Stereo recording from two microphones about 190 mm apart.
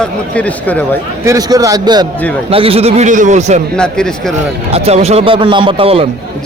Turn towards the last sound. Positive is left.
turn(degrees=-30)  # may be behind; listen again after turning